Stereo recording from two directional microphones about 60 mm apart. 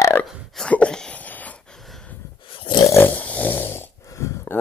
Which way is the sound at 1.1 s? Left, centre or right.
Left.